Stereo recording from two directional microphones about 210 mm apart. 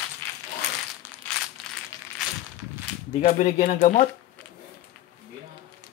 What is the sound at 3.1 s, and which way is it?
Speech, 35° left (ahead or behind).